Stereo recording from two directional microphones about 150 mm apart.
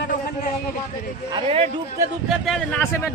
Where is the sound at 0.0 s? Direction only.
75° left (ahead or behind).